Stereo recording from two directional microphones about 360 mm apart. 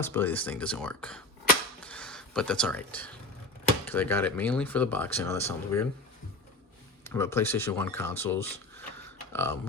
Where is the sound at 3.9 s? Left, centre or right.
Centre.